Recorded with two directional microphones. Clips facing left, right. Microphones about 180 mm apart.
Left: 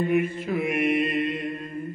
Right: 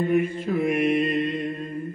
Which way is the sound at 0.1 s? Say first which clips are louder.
Right 1 dB; 5° left (ahead or behind).